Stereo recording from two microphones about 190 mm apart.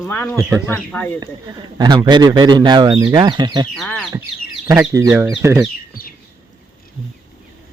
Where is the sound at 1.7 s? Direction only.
20° right (ahead or behind).